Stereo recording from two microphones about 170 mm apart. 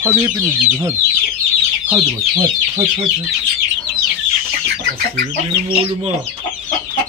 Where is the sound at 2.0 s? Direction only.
25° right (ahead or behind).